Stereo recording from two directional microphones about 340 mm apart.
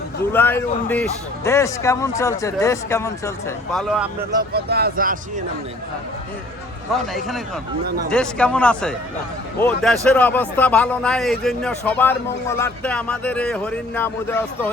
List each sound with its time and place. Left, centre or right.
0.3 s a man's voice: centre
4.4 s speech: right
6.9 s a man's voice: centre